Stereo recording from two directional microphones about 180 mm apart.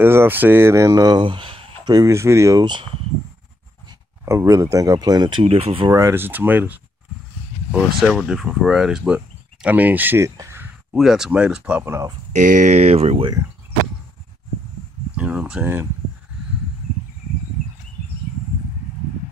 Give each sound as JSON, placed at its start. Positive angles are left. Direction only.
{"t": 0.0, "sound": "speech", "side_deg": -10}
{"t": 2.0, "sound": "speech", "side_deg": -15}
{"t": 4.2, "sound": "speech", "side_deg": -15}
{"t": 5.9, "sound": "speech", "side_deg": -15}
{"t": 8.0, "sound": "speech", "side_deg": 0}
{"t": 12.3, "sound": "speech", "side_deg": -45}
{"t": 15.1, "sound": "speech", "side_deg": -5}